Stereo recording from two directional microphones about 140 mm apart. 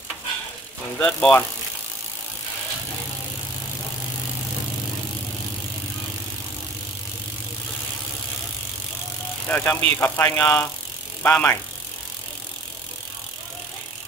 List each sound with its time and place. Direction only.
0.9 s speech: 10° left (ahead or behind)
9.5 s speech: 15° left (ahead or behind)